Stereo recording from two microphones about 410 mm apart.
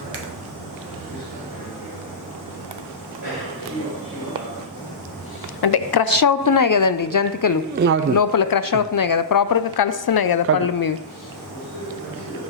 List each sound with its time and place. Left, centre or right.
5.5 s speech: left